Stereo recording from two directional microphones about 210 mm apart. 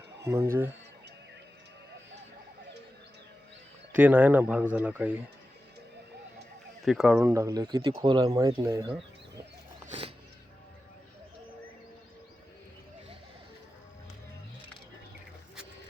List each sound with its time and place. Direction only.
0.2 s speech: 15° right (ahead or behind)
3.9 s speech: 10° right (ahead or behind)
6.8 s speech: centre (ahead or behind)